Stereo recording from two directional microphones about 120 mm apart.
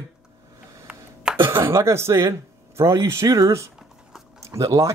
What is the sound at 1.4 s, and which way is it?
Speech, 20° right (ahead or behind).